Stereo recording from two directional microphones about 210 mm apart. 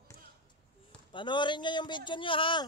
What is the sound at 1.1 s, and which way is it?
A man's voice, 20° left (ahead or behind).